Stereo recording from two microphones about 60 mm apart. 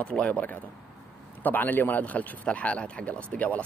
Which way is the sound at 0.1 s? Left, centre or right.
Centre.